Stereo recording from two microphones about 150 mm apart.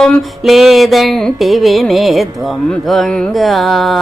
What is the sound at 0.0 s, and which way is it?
Music, centre (ahead or behind).